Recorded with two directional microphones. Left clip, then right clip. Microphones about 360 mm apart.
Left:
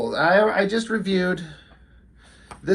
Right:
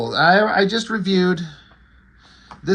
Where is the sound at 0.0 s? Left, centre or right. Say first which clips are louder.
Right 3 dB; centre.